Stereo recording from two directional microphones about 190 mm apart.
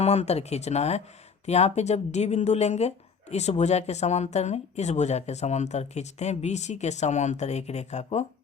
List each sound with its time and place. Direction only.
0.0 s speech: 35° left (ahead or behind)